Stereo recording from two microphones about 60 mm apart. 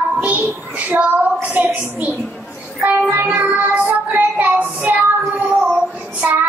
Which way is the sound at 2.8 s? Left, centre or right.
Right.